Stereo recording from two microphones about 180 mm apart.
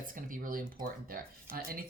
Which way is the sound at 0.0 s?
50° right (ahead or behind).